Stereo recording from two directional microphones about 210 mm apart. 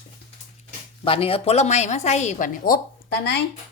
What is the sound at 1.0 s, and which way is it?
A woman's voice, 25° left (ahead or behind).